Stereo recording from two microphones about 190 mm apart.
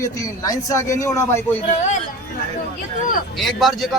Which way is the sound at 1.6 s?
40° left (ahead or behind).